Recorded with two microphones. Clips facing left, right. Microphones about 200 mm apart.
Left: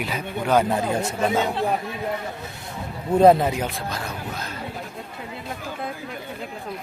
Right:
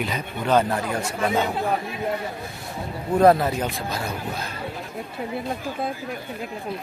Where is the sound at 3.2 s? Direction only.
20° left (ahead or behind).